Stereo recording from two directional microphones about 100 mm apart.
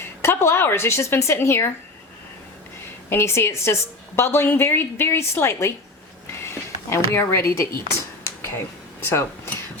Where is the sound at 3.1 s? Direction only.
25° left (ahead or behind).